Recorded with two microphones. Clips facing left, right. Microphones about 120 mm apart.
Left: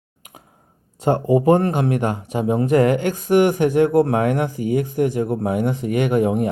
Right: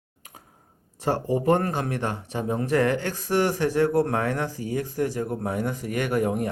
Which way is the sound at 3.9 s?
15° left (ahead or behind).